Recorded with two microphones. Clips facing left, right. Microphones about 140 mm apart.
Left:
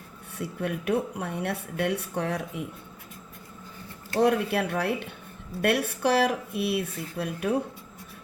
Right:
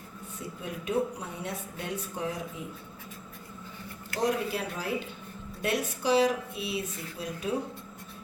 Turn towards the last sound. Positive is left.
turn(degrees=65)  # may be behind; listen again after turning